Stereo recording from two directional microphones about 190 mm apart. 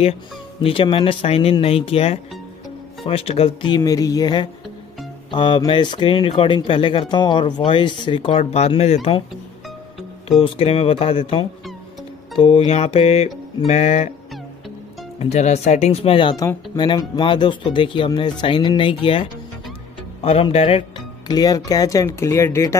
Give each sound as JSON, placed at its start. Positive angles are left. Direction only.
{"t": 0.6, "sound": "speech", "side_deg": 30}
{"t": 10.4, "sound": "speech", "side_deg": 30}
{"t": 15.1, "sound": "speech", "side_deg": 35}
{"t": 21.3, "sound": "speech", "side_deg": 20}